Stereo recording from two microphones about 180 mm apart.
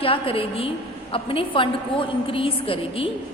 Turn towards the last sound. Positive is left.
turn(degrees=30)  # may be behind; listen again after turning